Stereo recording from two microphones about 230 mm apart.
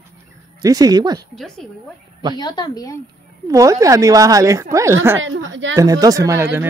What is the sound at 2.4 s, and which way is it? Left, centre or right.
Speech, centre.